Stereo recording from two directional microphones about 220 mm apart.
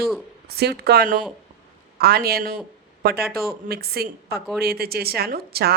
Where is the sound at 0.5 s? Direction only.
45° right (ahead or behind).